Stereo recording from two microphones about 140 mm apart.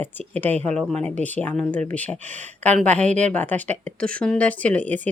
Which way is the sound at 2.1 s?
55° right (ahead or behind).